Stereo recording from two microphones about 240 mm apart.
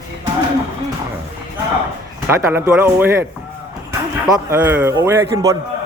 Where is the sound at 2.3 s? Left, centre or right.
Centre.